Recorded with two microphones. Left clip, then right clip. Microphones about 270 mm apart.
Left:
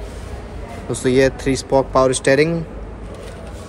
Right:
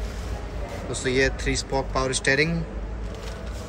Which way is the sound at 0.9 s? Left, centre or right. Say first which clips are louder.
Left 8 dB; centre.